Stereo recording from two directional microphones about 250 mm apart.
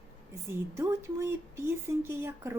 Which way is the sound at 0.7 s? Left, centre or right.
Centre.